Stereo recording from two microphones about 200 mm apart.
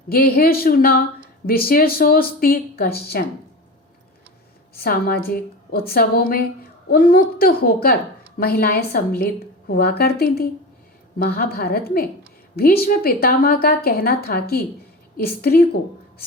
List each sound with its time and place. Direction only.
0.1 s a woman's voice: 50° left (ahead or behind)
4.7 s a woman's voice: 50° left (ahead or behind)